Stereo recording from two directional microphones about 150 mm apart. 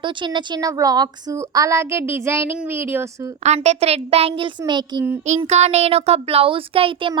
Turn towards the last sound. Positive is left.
turn(degrees=-35)  # may be behind; listen again after turning